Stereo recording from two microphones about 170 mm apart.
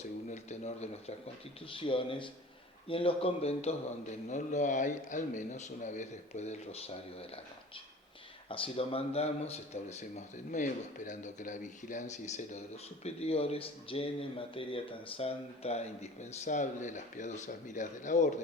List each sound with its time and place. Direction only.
0.3 s a man's voice: 40° left (ahead or behind)
8.4 s a man's voice: 30° left (ahead or behind)